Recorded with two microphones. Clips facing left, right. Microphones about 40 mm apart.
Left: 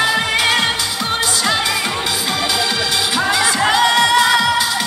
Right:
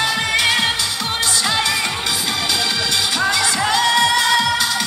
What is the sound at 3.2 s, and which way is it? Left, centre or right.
Music, centre.